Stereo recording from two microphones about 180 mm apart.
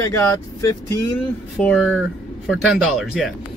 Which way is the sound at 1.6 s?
Centre (ahead or behind).